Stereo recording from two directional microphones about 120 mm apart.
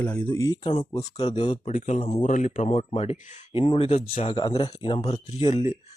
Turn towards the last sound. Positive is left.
turn(degrees=55)  # may be behind; listen again after turning